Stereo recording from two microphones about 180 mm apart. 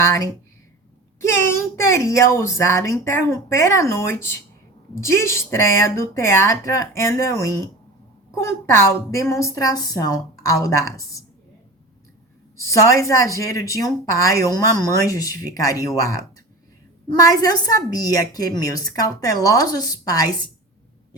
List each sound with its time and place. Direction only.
0.0 s a woman's voice: 15° left (ahead or behind)
12.5 s a woman's voice: 15° left (ahead or behind)